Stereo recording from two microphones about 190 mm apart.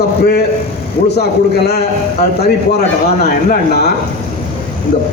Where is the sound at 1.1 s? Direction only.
60° left (ahead or behind).